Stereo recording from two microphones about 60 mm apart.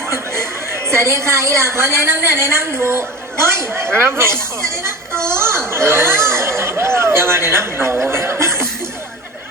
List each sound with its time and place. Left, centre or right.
0.1 s a woman's voice: right
5.2 s a sound: right
5.7 s speech: right